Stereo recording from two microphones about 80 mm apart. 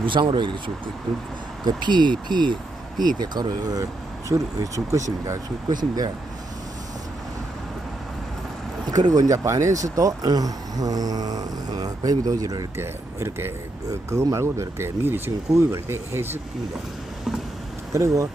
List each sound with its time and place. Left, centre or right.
0.0 s speech: right
1.6 s speech: right
4.3 s speech: right
8.9 s speech: right
12.7 s speech: right
17.9 s speech: right